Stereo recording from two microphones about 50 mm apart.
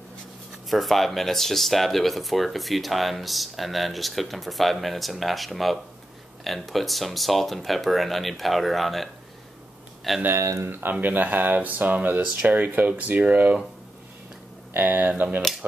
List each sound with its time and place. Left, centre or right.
0.7 s speech: centre
10.3 s speech: right
10.7 s speech: right
14.8 s speech: right